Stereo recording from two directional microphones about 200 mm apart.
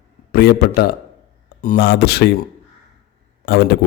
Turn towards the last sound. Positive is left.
turn(degrees=55)  # may be behind; listen again after turning